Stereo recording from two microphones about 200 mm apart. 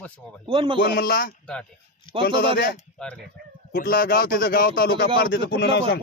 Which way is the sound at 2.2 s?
55° left (ahead or behind).